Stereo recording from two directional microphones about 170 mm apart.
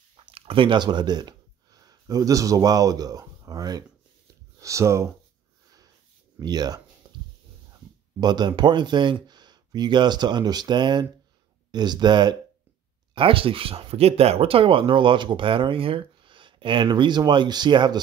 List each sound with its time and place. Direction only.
0.1 s speech: 30° right (ahead or behind); by 5.1 s 15° right (ahead or behind)
6.4 s speech: 25° right (ahead or behind)
7.0 s dog: 25° right (ahead or behind)
8.2 s speech: 25° right (ahead or behind)